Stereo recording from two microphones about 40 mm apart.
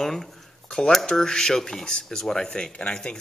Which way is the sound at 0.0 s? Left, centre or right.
Centre.